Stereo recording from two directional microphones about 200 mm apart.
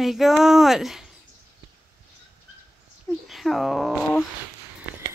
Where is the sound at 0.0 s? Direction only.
Centre (ahead or behind).